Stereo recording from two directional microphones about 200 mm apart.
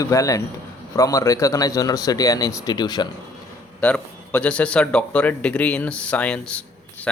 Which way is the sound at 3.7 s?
5° left (ahead or behind).